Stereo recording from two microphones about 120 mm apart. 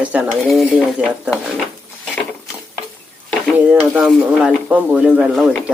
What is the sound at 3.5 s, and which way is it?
Speech, 10° right (ahead or behind).